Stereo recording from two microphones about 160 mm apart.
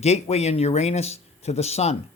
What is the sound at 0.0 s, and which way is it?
Speech, 45° left (ahead or behind).